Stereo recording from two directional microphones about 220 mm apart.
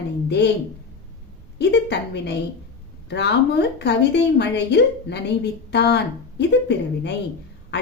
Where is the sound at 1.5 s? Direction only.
50° left (ahead or behind).